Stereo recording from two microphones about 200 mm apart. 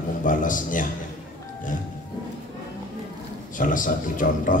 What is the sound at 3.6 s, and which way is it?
Speech, 40° left (ahead or behind).